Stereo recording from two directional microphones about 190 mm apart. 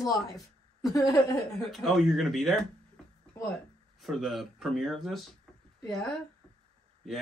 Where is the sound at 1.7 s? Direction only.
Centre (ahead or behind).